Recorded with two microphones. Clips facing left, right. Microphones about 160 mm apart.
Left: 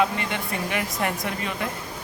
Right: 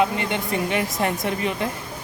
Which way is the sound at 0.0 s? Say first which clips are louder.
Right 2 dB; 20° right (ahead or behind).